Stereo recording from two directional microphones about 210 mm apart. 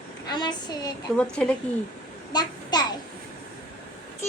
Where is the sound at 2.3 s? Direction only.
20° left (ahead or behind).